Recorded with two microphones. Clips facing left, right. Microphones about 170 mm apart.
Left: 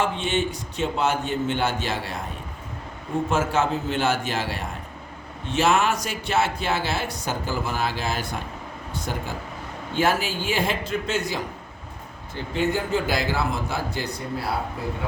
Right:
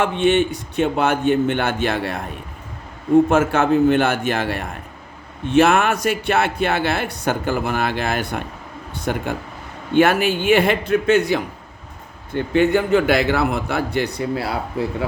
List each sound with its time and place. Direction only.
0.0 s speech: 60° right (ahead or behind)
3.2 s a man's voice: 60° right (ahead or behind); by 14.8 s 85° right